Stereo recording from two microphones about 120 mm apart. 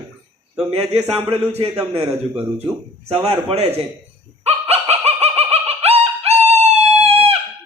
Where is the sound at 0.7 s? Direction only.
65° right (ahead or behind).